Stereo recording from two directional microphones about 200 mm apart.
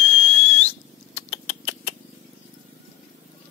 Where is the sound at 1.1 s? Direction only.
30° left (ahead or behind).